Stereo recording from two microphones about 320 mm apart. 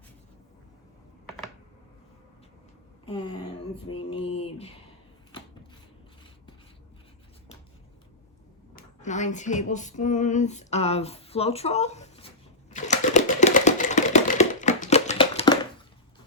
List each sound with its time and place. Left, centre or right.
3.8 s a sound: centre
4.4 s speech: centre
8.7 s speech: left
12.7 s typewriter: left